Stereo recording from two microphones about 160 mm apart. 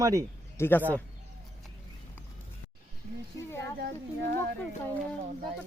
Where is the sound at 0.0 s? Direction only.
20° right (ahead or behind).